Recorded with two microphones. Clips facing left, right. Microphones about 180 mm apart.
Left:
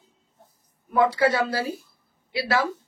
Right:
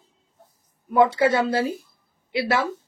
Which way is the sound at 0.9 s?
25° right (ahead or behind).